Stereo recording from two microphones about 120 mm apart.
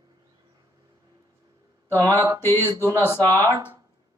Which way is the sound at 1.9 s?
25° right (ahead or behind).